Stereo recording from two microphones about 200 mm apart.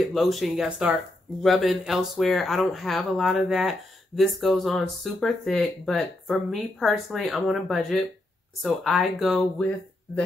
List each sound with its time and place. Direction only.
0.0 s speech: centre (ahead or behind)